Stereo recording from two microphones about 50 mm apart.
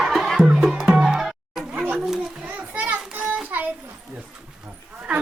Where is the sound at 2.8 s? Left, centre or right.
Right.